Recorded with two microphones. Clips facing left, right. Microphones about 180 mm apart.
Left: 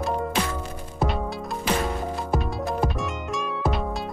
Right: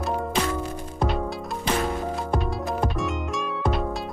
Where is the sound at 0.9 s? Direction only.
Centre (ahead or behind).